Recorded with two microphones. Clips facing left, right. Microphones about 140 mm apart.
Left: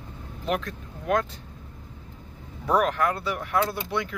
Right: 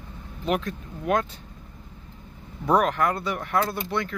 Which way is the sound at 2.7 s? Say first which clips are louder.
Right 1 dB; centre (ahead or behind).